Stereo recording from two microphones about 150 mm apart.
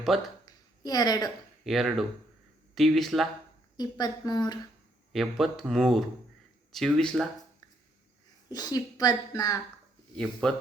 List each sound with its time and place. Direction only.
0.1 s speech: centre (ahead or behind)
0.4 s a sound: 25° left (ahead or behind)
1.6 s speech: centre (ahead or behind)
3.8 s a woman's voice: 25° left (ahead or behind)
5.1 s speech: centre (ahead or behind)
8.4 s a woman's voice: 25° left (ahead or behind)
10.4 s speech: 5° left (ahead or behind)